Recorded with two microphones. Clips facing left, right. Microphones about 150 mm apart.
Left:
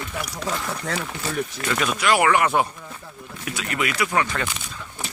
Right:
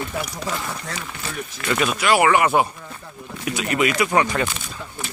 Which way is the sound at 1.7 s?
5° right (ahead or behind).